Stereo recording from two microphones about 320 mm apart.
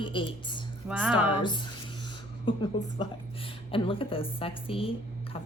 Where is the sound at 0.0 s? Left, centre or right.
Centre.